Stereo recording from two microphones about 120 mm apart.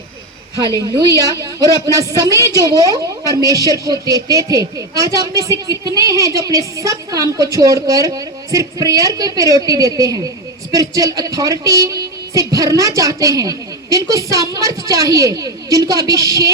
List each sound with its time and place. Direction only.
1.0 s a woman's voice: 25° left (ahead or behind)
1.9 s speech: 30° right (ahead or behind)